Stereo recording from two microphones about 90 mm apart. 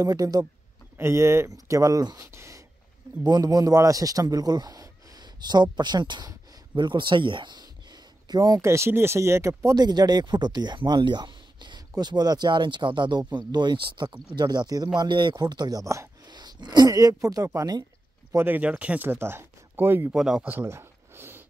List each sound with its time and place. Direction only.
0.0 s speech: 45° right (ahead or behind)
0.9 s speech: 30° right (ahead or behind)
2.3 s writing: 35° right (ahead or behind)
3.3 s a man's voice: 50° right (ahead or behind)
15.0 s speech: 60° right (ahead or behind)
15.3 s speech: 50° right (ahead or behind)
16.3 s speech: 50° right (ahead or behind)
18.3 s speech: 25° right (ahead or behind)
20.1 s speech: 5° right (ahead or behind)
20.6 s a sound: 30° right (ahead or behind)